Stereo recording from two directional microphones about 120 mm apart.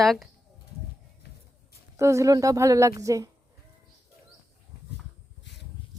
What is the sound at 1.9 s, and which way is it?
A woman's voice, 25° right (ahead or behind).